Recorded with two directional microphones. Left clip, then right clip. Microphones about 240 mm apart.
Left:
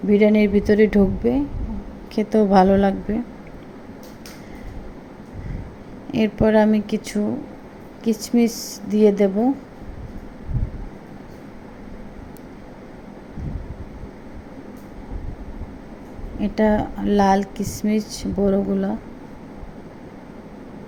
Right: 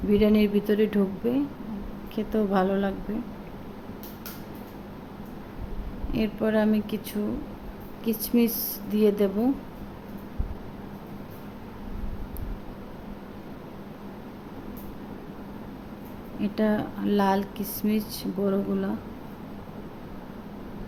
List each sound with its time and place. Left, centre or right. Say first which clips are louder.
0.1 s a woman's voice: left 6 dB; centre
6.1 s a woman's voice: left 9 dB; centre
16.4 s a woman's voice: left 7 dB; centre